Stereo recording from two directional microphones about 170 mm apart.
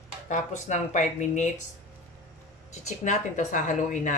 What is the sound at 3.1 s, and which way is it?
A woman's voice, 45° left (ahead or behind).